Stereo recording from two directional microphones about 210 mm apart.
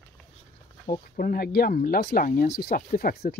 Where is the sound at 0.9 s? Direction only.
40° left (ahead or behind).